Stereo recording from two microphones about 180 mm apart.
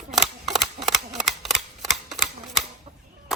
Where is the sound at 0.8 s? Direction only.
Centre (ahead or behind).